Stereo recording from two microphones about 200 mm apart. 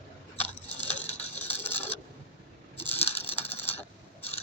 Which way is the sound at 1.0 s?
30° left (ahead or behind).